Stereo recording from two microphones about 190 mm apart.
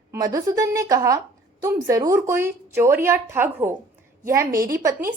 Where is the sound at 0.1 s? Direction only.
20° right (ahead or behind).